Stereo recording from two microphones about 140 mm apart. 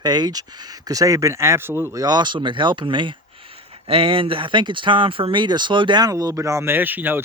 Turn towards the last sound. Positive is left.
turn(degrees=-15)  # may be behind; listen again after turning